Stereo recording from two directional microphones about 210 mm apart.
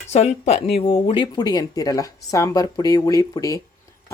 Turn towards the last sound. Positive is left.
turn(degrees=15)  # may be behind; listen again after turning